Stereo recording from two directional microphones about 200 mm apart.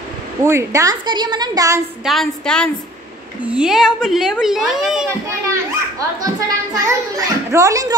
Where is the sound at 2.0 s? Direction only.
Centre (ahead or behind).